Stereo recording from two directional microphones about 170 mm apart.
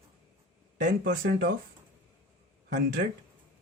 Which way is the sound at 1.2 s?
60° right (ahead or behind).